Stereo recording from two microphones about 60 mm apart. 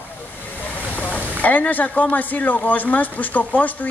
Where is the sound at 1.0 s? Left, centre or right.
Left.